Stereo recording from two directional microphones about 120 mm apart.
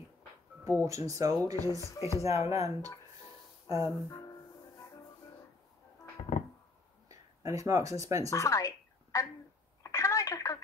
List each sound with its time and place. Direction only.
0.8 s speech: 25° right (ahead or behind)
1.8 s speech: 25° left (ahead or behind)
2.2 s speech: 25° right (ahead or behind)
3.6 s a sound: 25° right (ahead or behind)
7.1 s speech: 30° right (ahead or behind)
8.3 s a woman's voice: 25° left (ahead or behind)
9.8 s telephone: 25° left (ahead or behind)